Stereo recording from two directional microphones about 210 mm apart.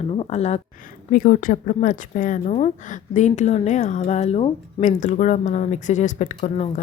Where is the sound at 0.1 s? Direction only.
30° left (ahead or behind).